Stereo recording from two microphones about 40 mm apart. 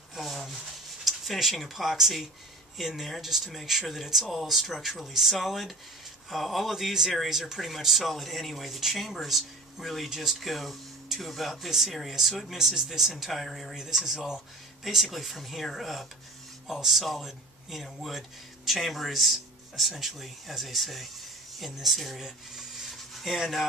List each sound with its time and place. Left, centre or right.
0.1 s rub: centre
1.0 s speech: centre
13.3 s speech: centre
13.7 s speech: centre
22.8 s a sound: centre